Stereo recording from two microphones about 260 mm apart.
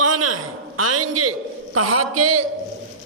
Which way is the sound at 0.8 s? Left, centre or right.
Right.